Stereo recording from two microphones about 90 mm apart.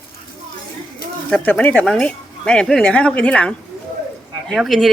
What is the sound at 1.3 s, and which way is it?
Speech, 15° left (ahead or behind).